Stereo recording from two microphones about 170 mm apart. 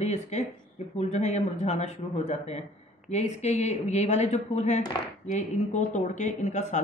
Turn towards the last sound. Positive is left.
turn(degrees=45)  # may be behind; listen again after turning